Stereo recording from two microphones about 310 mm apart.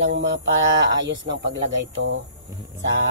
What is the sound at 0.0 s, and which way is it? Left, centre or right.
Speech, right.